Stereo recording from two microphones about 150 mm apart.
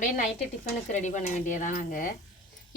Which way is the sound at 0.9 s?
55° left (ahead or behind).